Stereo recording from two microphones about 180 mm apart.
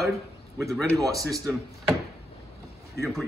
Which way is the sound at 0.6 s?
Centre (ahead or behind).